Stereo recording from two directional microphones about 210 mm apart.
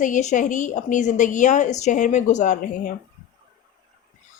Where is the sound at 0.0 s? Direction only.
35° left (ahead or behind).